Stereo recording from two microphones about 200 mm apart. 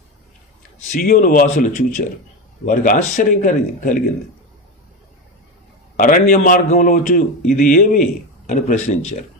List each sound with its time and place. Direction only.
0.9 s a man's voice: 45° left (ahead or behind)
6.0 s a man's voice: 45° left (ahead or behind)